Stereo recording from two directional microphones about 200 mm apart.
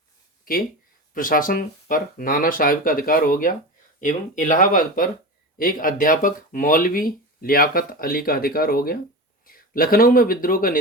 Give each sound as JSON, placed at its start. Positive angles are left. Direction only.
{"t": 1.1, "sound": "speech", "side_deg": 45}